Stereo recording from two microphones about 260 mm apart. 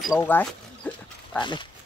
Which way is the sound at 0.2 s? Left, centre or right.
Centre.